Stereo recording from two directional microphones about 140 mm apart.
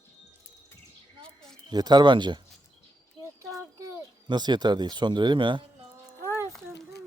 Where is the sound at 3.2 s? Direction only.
25° right (ahead or behind).